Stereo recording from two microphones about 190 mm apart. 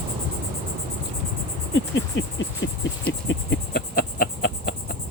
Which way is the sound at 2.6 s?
80° left.